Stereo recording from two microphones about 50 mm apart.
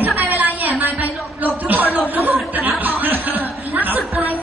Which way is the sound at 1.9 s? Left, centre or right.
Right.